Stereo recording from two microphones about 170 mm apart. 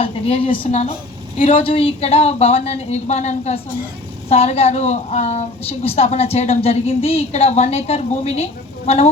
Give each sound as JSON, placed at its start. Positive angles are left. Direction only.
{"t": 0.0, "sound": "a woman's voice", "side_deg": 35}
{"t": 1.6, "sound": "a woman's voice", "side_deg": 35}